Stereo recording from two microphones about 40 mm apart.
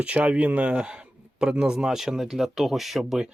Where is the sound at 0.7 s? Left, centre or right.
Right.